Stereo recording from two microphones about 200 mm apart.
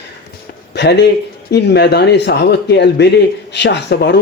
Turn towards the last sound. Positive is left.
turn(degrees=55)  # may be behind; listen again after turning